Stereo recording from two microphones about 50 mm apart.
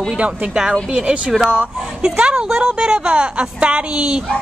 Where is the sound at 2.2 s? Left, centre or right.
Centre.